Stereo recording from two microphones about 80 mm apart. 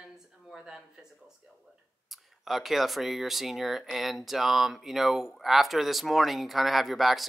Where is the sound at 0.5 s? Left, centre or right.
Centre.